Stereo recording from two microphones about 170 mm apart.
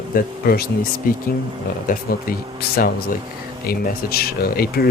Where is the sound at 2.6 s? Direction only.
65° left (ahead or behind).